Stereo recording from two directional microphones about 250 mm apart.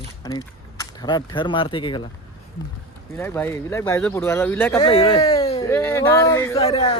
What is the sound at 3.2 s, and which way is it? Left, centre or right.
Speech, centre.